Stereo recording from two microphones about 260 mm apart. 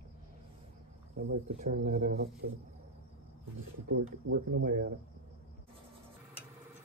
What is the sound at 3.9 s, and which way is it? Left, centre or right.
Speech, right.